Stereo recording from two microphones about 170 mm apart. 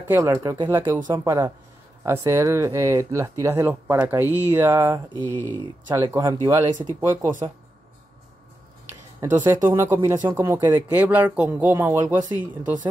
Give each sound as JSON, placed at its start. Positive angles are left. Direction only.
{"t": 0.0, "sound": "speech", "side_deg": -15}
{"t": 9.5, "sound": "speech", "side_deg": -15}